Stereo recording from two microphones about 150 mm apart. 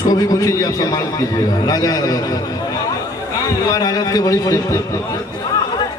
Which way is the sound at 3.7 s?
25° left (ahead or behind).